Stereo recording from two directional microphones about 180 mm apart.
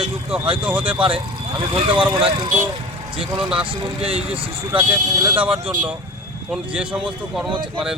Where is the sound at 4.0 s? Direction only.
35° right (ahead or behind).